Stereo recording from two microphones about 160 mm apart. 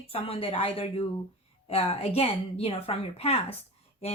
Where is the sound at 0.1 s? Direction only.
35° left (ahead or behind).